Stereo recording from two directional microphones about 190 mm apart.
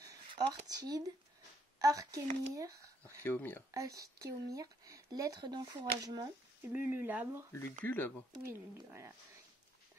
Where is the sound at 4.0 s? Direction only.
15° right (ahead or behind).